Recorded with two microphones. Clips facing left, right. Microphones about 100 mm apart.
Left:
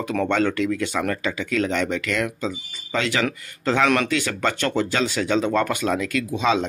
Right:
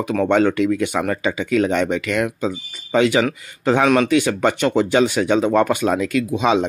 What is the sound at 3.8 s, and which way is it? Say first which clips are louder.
Speech: right 4 dB; 10° right (ahead or behind).